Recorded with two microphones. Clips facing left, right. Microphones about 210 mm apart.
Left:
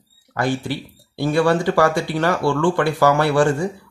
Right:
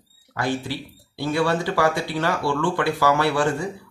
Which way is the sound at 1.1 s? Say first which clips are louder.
Left 5 dB; 50° left (ahead or behind).